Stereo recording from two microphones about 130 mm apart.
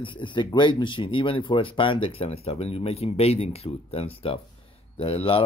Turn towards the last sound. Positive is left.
turn(degrees=50)  # may be behind; listen again after turning